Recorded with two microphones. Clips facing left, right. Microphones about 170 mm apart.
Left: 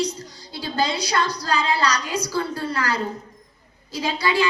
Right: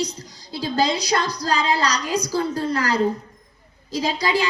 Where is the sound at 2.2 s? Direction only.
40° right (ahead or behind).